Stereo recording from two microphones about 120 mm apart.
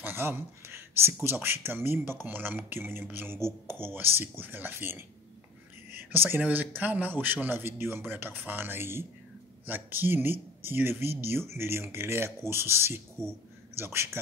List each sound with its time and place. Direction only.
0.0 s speech: 20° right (ahead or behind)